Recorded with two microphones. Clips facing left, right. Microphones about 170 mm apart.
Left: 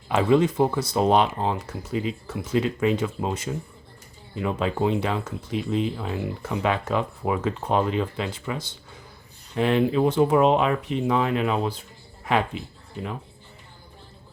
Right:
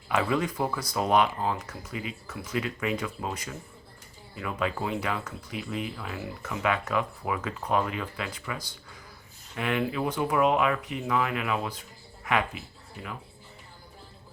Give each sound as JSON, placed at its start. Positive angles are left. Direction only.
{"t": 0.1, "sound": "speech", "side_deg": 25}